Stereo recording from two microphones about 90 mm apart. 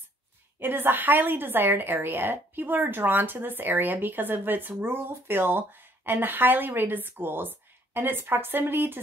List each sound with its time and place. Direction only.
0.6 s a woman's voice: 25° right (ahead or behind)